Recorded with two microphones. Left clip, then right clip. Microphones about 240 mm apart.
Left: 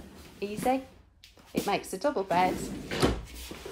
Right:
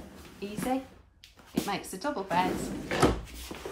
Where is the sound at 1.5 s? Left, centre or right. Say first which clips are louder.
Left 3 dB; centre.